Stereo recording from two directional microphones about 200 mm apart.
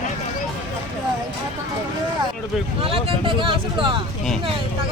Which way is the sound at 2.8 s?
25° right (ahead or behind).